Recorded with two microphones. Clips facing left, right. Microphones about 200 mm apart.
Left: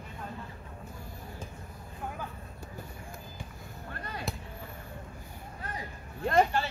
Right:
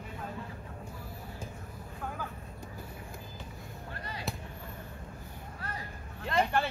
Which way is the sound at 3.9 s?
50° left (ahead or behind).